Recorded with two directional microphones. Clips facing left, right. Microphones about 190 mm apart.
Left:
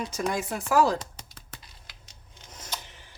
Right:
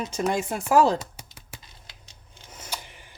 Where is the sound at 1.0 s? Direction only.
10° right (ahead or behind).